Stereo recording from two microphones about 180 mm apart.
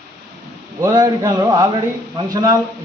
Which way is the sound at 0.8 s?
20° right (ahead or behind).